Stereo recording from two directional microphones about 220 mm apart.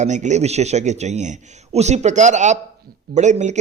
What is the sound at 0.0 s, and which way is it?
A man's voice, 30° right (ahead or behind).